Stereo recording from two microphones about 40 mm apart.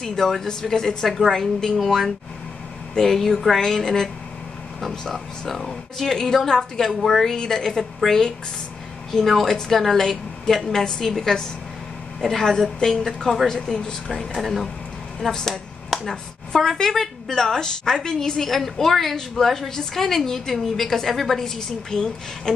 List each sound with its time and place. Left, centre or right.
0.0 s speech: centre
1.0 s a woman's voice: centre
1.3 s speech: centre
9.4 s a woman's voice: centre
13.5 s speech: centre
14.1 s a woman's voice: centre
21.5 s speech: centre